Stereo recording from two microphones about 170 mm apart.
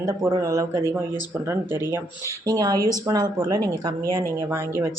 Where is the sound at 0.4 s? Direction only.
20° right (ahead or behind).